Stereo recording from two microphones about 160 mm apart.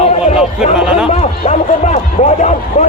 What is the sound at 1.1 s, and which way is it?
Speech, 45° left (ahead or behind).